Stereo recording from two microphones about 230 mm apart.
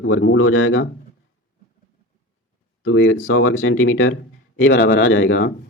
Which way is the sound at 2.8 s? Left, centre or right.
Left.